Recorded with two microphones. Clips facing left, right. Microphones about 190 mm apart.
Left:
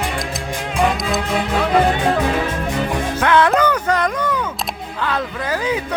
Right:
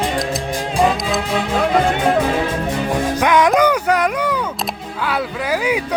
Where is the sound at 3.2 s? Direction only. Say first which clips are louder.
Right 1 dB; 15° right (ahead or behind).